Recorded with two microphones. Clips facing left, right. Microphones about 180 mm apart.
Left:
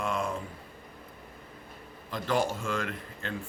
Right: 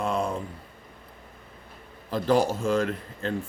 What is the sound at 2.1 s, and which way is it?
Speech, 40° right (ahead or behind).